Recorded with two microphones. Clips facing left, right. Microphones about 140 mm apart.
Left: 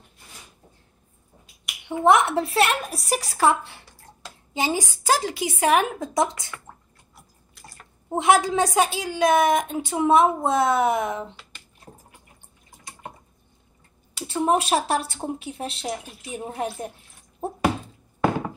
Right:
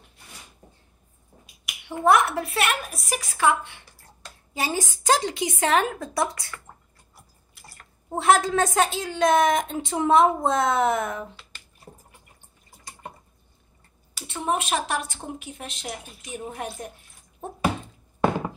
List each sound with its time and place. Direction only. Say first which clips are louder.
1.9 s speech: left 2 dB; 25° left (ahead or behind)
4.6 s a woman's voice: left 3 dB; 15° left (ahead or behind)
8.1 s a woman's voice: left 1 dB; 15° left (ahead or behind)
14.2 s speech: left 5 dB; 35° left (ahead or behind)